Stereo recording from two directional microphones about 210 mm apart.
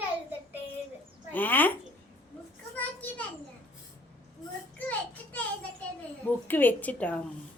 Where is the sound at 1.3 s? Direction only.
10° left (ahead or behind).